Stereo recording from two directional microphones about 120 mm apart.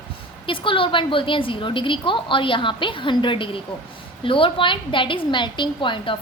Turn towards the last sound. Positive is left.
turn(degrees=45)  # may be behind; listen again after turning